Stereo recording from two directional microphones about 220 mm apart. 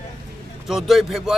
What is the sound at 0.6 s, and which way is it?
Speech, centre (ahead or behind).